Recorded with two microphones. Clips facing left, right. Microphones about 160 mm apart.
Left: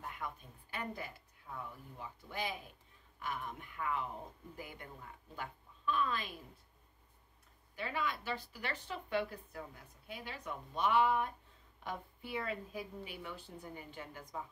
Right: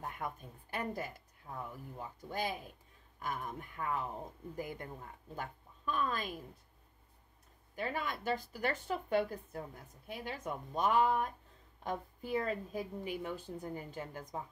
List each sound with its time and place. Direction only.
0.0 s a woman's voice: 50° right (ahead or behind)
7.7 s a woman's voice: 45° right (ahead or behind)